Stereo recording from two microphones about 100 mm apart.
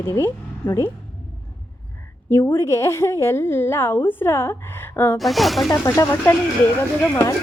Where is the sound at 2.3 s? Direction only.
25° left (ahead or behind).